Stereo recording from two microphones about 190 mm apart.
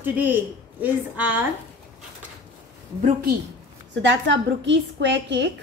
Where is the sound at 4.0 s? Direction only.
70° right (ahead or behind).